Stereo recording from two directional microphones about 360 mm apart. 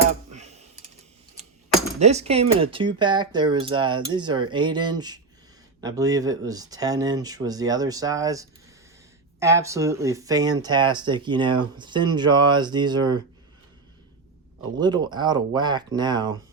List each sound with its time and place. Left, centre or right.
0.3 s a sound: centre
2.0 s speech: centre
14.8 s speech: centre